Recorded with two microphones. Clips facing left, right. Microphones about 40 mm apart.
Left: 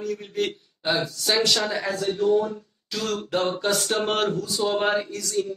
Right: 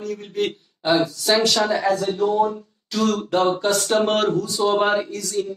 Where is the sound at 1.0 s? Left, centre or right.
Centre.